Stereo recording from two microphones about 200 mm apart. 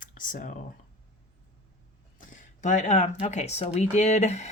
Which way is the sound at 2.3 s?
40° left (ahead or behind).